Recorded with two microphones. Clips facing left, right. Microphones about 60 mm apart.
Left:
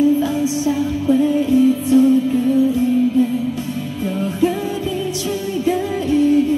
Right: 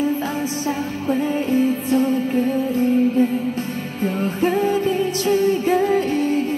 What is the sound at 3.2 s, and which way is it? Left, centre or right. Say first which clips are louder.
Music: left 1 dB; right.